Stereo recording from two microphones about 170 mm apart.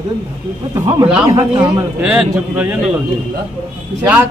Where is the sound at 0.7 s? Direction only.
20° right (ahead or behind).